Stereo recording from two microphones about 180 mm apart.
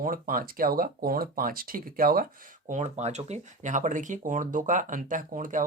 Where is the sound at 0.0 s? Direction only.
50° right (ahead or behind).